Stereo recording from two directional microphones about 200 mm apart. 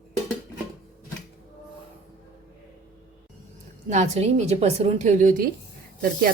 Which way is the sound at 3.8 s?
35° right (ahead or behind).